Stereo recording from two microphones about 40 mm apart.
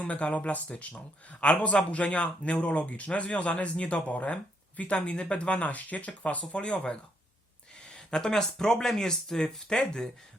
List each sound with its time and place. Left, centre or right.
0.0 s speech: left
7.9 s speech: centre